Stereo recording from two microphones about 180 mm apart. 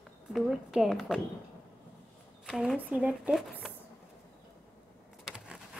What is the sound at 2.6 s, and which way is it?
Speech, 5° right (ahead or behind).